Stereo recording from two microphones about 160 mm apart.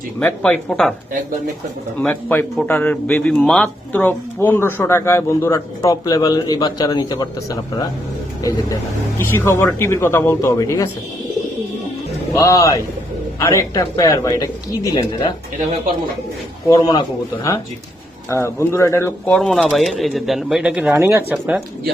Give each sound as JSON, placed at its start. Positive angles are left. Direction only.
{"t": 0.2, "sound": "speech", "side_deg": 10}
{"t": 2.0, "sound": "speech", "side_deg": 10}
{"t": 12.3, "sound": "speech", "side_deg": 20}
{"t": 16.6, "sound": "speech", "side_deg": 25}
{"t": 20.9, "sound": "speech", "side_deg": -15}